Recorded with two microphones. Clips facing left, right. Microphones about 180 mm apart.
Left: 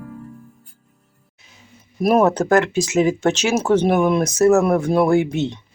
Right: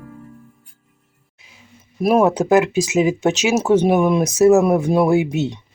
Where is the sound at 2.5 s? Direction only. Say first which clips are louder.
Right 2 dB; 5° right (ahead or behind).